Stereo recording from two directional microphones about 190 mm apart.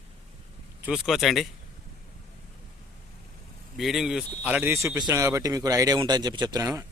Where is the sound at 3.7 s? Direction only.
Centre (ahead or behind); by 6.9 s 20° right (ahead or behind).